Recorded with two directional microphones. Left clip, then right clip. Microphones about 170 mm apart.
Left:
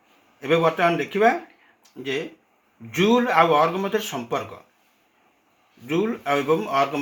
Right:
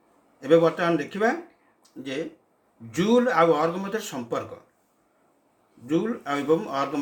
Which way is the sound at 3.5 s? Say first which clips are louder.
Left 4 dB; 35° left (ahead or behind).